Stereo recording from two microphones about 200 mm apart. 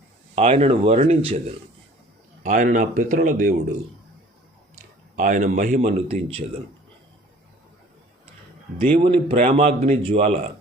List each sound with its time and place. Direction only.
0.3 s speech: 30° right (ahead or behind)
2.4 s speech: 40° right (ahead or behind)
5.1 s speech: 40° right (ahead or behind)
9.0 s speech: 30° right (ahead or behind)